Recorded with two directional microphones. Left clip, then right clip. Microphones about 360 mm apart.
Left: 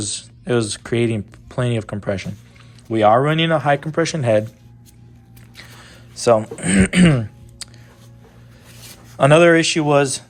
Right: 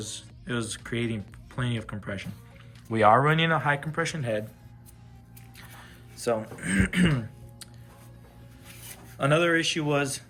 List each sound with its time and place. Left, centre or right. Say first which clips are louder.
0.0 s speech: left 11 dB; centre
5.5 s throat clearing: left 8 dB; centre
9.1 s speech: left 12 dB; centre